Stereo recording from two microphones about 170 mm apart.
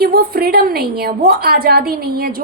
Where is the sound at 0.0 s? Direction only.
65° right (ahead or behind).